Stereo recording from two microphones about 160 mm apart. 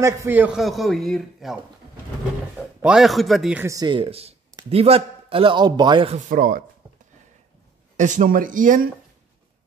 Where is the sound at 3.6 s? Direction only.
25° right (ahead or behind).